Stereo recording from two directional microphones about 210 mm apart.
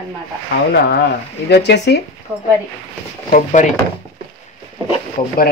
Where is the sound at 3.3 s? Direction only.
35° left (ahead or behind).